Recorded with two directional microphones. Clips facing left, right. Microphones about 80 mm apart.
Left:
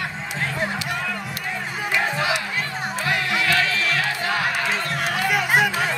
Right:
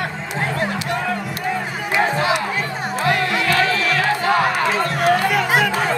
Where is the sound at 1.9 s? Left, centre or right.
Right.